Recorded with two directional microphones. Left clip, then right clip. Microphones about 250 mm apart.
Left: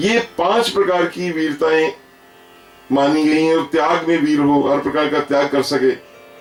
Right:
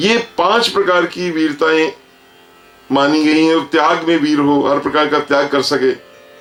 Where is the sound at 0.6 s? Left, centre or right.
Right.